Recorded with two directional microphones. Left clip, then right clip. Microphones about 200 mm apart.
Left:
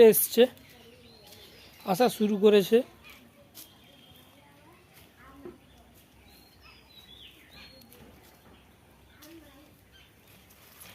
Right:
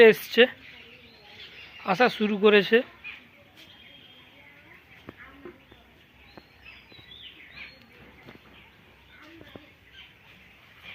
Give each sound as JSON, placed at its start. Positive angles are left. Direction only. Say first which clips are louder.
{"t": 0.0, "sound": "speech", "louder": "right 2 dB", "side_deg": 10}
{"t": 1.9, "sound": "speech", "louder": "right 3 dB", "side_deg": 10}